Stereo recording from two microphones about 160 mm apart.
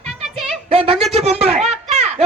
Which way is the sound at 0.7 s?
35° right (ahead or behind).